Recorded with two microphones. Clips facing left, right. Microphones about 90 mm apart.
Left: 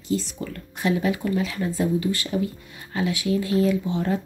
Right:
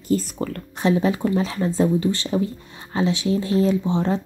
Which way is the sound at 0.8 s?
30° right (ahead or behind).